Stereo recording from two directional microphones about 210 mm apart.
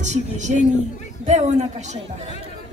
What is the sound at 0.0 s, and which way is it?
A woman's voice, 35° right (ahead or behind).